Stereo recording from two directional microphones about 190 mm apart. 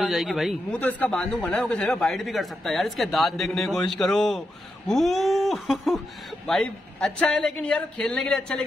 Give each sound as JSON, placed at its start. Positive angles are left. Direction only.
{"t": 0.0, "sound": "a man's voice", "side_deg": 0}